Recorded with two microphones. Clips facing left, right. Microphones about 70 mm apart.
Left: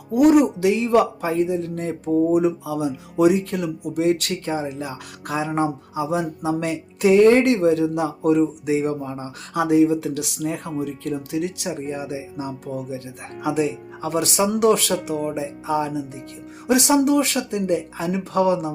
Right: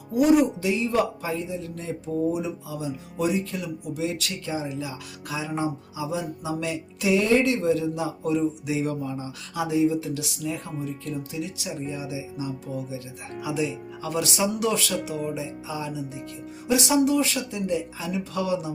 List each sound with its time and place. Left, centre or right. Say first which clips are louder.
0.1 s speech: left 4 dB; left
15.1 s speech: left 5 dB; left